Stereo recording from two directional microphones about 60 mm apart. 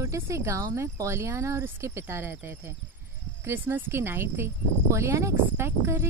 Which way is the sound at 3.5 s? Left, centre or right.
Right.